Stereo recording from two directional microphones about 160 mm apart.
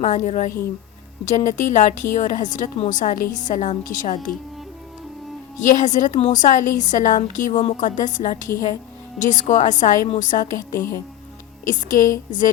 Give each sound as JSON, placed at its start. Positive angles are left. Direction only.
{"t": 0.0, "sound": "a woman's voice", "side_deg": 50}
{"t": 5.5, "sound": "a woman's voice", "side_deg": 50}
{"t": 10.8, "sound": "speech", "side_deg": 20}
{"t": 11.6, "sound": "speech", "side_deg": 55}